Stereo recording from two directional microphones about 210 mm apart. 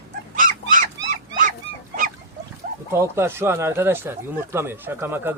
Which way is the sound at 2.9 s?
10° right (ahead or behind).